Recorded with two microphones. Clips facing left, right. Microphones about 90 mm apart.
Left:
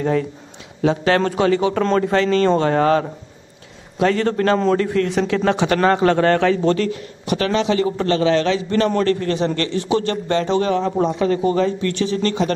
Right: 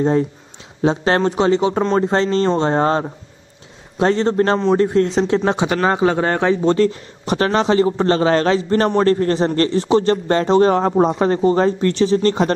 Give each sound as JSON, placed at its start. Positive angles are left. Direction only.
{"t": 0.0, "sound": "a man's voice", "side_deg": -30}
{"t": 6.9, "sound": "a man's voice", "side_deg": -35}